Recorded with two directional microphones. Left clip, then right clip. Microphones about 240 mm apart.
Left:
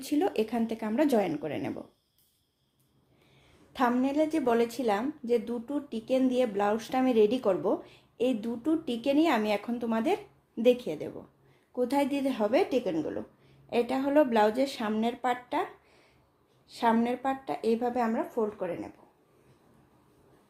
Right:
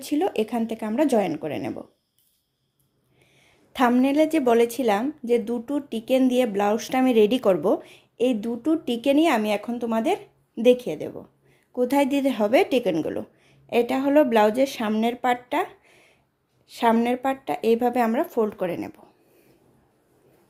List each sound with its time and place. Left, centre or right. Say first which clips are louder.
0.0 s a woman's voice: right 4 dB; centre
3.7 s a woman's voice: right 7 dB; right
16.6 s a woman's voice: right 6 dB; right